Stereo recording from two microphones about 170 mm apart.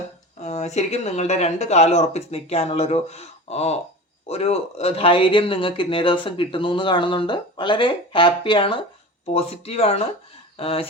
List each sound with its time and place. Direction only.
0.4 s speech: 40° left (ahead or behind)